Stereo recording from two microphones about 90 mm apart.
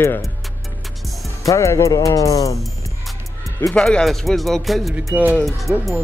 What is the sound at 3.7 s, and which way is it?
Speech, 10° left (ahead or behind).